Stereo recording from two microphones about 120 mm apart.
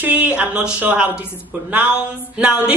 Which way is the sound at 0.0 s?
10° right (ahead or behind).